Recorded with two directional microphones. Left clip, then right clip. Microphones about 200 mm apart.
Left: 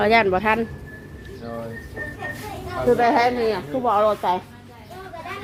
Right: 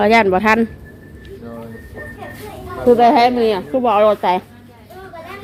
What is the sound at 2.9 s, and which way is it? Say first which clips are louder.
A woman's voice: right 7 dB; 40° right (ahead or behind).